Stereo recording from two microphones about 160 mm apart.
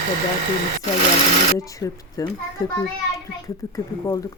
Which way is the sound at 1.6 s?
20° left (ahead or behind).